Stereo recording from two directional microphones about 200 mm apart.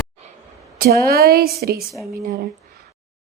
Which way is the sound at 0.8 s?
50° right (ahead or behind).